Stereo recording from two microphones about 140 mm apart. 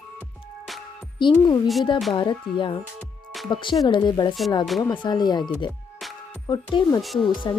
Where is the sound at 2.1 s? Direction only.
35° left (ahead or behind).